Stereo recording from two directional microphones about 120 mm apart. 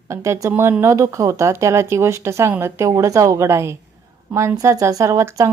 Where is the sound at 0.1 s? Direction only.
25° right (ahead or behind).